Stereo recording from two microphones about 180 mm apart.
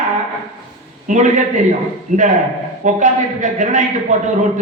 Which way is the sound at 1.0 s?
45° right (ahead or behind).